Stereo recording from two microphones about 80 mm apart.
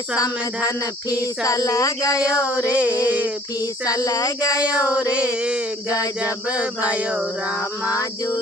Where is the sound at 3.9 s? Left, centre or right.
Left.